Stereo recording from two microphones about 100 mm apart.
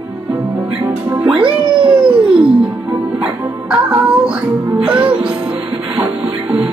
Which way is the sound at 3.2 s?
10° right (ahead or behind).